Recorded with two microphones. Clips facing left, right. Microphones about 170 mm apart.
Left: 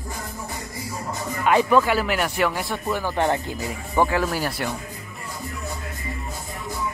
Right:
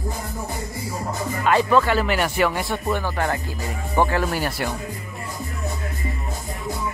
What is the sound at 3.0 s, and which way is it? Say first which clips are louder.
Speech: left 2 dB; 20° left (ahead or behind).